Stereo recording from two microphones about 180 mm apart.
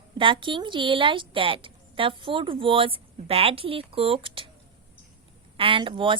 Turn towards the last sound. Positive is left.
turn(degrees=-30)  # may be behind; listen again after turning